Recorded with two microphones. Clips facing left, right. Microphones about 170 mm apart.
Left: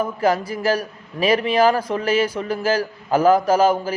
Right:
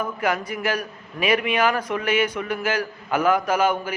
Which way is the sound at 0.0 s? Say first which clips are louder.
Left 5 dB; 30° left (ahead or behind).